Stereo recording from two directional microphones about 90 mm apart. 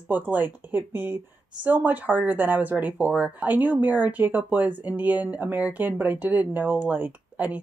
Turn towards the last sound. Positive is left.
turn(degrees=-20)  # may be behind; listen again after turning